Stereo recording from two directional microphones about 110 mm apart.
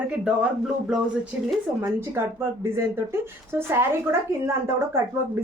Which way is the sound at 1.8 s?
25° right (ahead or behind).